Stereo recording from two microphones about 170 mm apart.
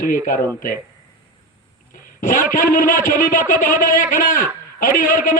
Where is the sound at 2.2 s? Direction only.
55° left (ahead or behind).